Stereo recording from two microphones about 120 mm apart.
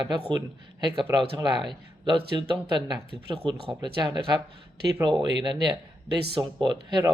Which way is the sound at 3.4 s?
40° right (ahead or behind).